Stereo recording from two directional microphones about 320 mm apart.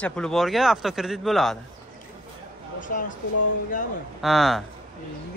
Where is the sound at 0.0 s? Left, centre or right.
Centre.